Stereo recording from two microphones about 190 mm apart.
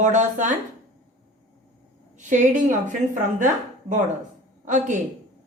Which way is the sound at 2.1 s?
40° right (ahead or behind).